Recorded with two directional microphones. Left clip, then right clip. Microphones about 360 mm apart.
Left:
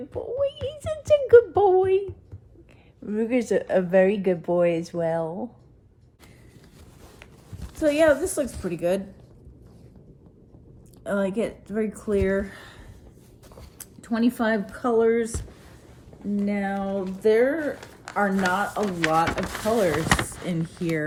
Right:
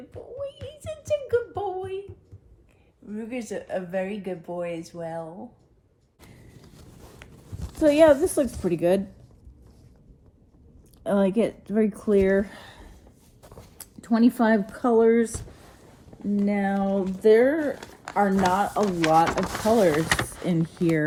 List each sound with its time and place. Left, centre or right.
0.3 s music: left
3.1 s speech: left
7.9 s speech: centre
11.0 s speech: centre
16.4 s speech: centre